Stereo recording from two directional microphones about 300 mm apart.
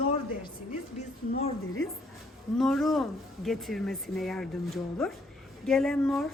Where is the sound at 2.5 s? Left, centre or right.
Centre.